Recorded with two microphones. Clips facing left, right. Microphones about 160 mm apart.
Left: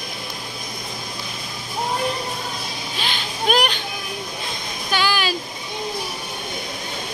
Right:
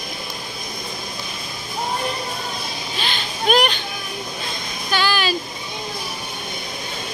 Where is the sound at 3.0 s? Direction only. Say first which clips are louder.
Right 1 dB; 10° left (ahead or behind).